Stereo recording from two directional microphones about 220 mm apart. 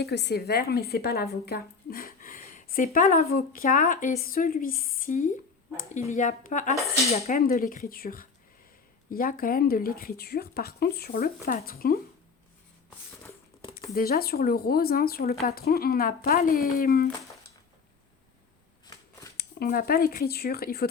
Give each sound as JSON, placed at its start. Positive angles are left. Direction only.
{"t": 0.0, "sound": "a woman's voice", "side_deg": 50}
{"t": 13.9, "sound": "speech", "side_deg": 45}
{"t": 18.9, "sound": "scissors", "side_deg": 15}
{"t": 19.4, "sound": "speech", "side_deg": 45}